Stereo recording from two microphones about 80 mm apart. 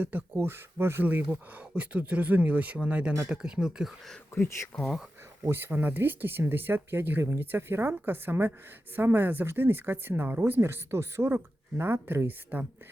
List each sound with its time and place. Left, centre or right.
0.0 s speech: right
0.3 s speech: right; by 3.9 s centre
4.4 s speech: left
5.5 s speech: right